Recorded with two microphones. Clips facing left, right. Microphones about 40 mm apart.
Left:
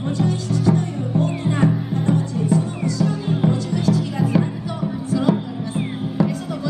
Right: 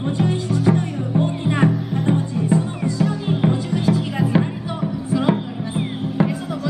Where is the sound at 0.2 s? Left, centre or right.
Right.